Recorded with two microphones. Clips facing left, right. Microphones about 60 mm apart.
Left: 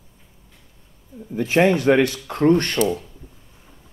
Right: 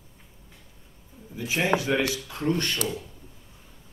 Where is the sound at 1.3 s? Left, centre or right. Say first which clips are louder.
Left 8 dB; left.